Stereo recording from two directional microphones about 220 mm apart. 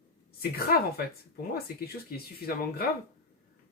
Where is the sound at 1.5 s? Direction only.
45° left (ahead or behind).